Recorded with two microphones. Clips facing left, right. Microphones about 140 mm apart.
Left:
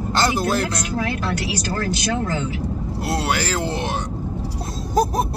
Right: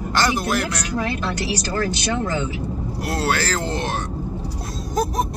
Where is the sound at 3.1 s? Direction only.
15° left (ahead or behind).